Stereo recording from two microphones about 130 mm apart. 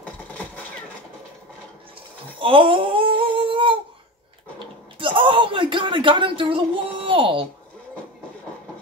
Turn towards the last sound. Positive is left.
turn(degrees=-40)  # may be behind; listen again after turning